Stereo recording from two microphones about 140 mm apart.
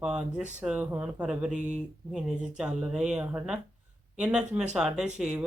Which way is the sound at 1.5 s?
60° right (ahead or behind).